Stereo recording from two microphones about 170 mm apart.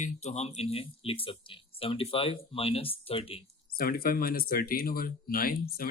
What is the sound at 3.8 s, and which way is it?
Speech, 60° left (ahead or behind).